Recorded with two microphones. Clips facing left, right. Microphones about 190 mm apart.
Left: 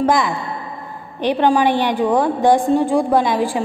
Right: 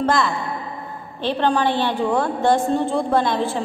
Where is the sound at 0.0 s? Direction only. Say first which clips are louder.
Left 3 dB; 15° left (ahead or behind).